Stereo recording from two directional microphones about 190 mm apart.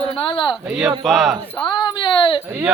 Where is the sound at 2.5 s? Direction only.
5° right (ahead or behind).